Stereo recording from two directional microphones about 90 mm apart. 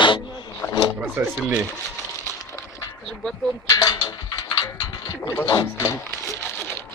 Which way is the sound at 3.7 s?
45° left (ahead or behind).